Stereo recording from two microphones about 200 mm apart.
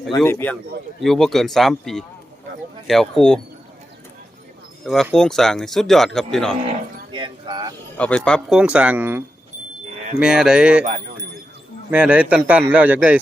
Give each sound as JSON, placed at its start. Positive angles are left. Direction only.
{"t": 0.2, "sound": "a man's voice", "side_deg": 10}
{"t": 5.1, "sound": "speech", "side_deg": 0}
{"t": 6.7, "sound": "speech", "side_deg": -25}
{"t": 7.9, "sound": "speech", "side_deg": 5}
{"t": 11.9, "sound": "a man's voice", "side_deg": -5}